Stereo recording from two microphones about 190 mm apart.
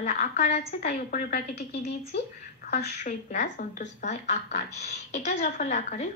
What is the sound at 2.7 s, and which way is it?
Speech, 40° left (ahead or behind).